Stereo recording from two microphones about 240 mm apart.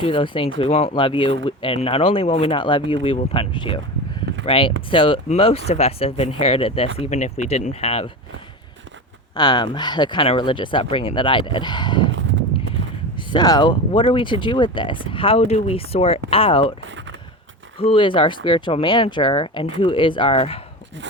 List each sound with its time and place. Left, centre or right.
0.0 s speech: left
9.3 s speech: centre
12.8 s a sound: right
13.1 s speech: centre
16.8 s a sound: right
17.7 s speech: left